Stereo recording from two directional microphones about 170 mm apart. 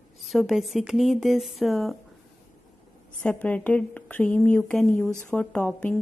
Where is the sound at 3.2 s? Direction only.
10° left (ahead or behind).